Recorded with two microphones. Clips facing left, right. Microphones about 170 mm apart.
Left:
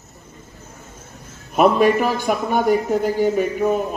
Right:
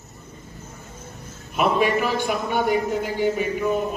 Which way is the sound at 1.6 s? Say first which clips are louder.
Left 6 dB; 45° left (ahead or behind).